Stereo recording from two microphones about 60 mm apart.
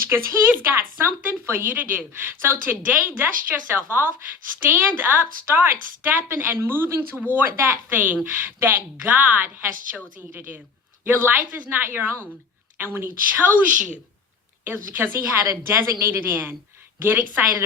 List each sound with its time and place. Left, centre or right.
0.1 s speech: right
0.4 s speech: right
2.8 s speech: right
7.9 s a woman's voice: right
15.6 s speech: right